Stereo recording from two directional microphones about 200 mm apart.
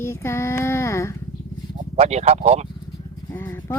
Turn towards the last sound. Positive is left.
turn(degrees=15)  # may be behind; listen again after turning